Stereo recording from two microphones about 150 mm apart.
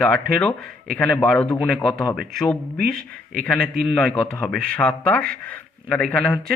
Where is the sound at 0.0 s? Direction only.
5° left (ahead or behind).